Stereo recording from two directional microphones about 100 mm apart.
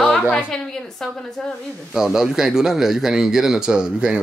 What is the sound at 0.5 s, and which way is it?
Speech, 5° left (ahead or behind).